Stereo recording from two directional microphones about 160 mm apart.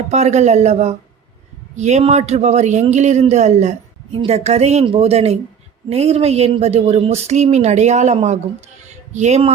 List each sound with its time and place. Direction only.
0.1 s speech: 45° right (ahead or behind)